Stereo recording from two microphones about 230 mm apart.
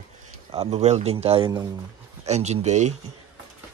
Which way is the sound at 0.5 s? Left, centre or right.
Right.